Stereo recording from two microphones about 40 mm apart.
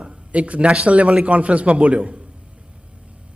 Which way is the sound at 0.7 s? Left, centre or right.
Right.